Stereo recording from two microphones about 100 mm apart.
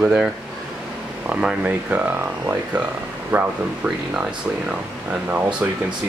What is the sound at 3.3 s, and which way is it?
Speech, 20° right (ahead or behind).